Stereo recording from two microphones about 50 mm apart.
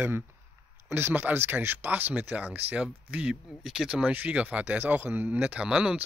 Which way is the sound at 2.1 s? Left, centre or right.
Right.